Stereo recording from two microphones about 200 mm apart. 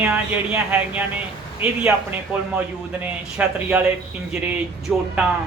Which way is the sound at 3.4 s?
5° right (ahead or behind).